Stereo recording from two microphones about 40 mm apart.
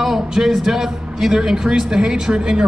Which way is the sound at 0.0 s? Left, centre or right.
Centre.